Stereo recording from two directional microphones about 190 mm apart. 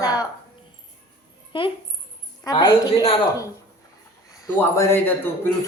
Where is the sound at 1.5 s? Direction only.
25° left (ahead or behind).